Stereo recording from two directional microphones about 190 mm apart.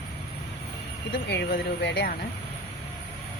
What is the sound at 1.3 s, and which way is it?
Speech, 60° left (ahead or behind).